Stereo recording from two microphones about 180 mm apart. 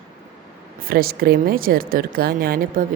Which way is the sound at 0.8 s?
55° right (ahead or behind).